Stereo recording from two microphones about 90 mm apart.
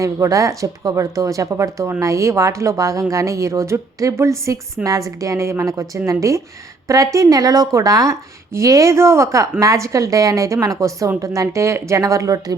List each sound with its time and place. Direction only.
0.0 s a woman's voice: 35° right (ahead or behind)